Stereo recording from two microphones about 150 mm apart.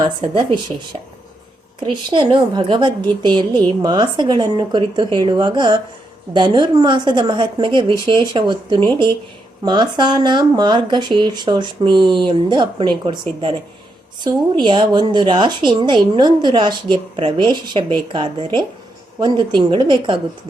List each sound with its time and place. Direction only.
0.0 s speech: 30° right (ahead or behind)
1.8 s speech: 30° right (ahead or behind)